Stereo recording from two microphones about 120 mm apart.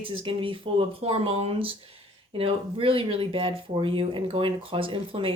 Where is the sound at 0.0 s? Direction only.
45° right (ahead or behind).